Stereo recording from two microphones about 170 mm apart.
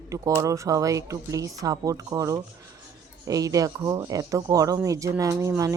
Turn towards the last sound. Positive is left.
turn(degrees=-20)  # may be behind; listen again after turning